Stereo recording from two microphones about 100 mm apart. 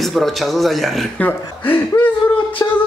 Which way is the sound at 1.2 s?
15° left (ahead or behind).